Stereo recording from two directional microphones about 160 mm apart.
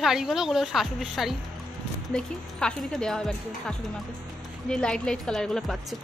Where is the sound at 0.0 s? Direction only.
Centre (ahead or behind).